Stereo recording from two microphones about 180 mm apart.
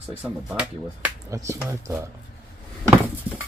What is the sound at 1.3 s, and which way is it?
Speech, 15° right (ahead or behind).